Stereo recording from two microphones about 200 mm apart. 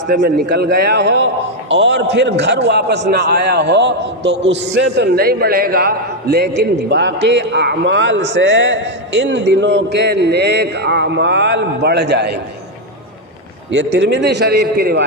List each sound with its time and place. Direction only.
0.1 s a man's voice: 50° right (ahead or behind)
13.7 s a man's voice: 60° right (ahead or behind)